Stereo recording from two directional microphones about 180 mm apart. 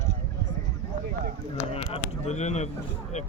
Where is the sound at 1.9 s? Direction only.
40° left (ahead or behind).